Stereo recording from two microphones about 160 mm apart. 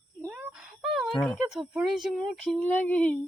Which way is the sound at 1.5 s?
5° right (ahead or behind).